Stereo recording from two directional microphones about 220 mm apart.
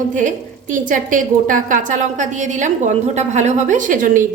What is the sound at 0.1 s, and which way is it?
A woman's voice, 35° right (ahead or behind).